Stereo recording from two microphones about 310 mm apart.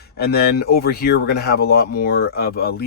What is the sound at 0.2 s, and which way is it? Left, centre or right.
Speech, left.